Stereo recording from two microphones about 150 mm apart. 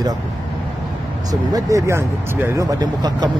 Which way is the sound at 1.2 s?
25° right (ahead or behind).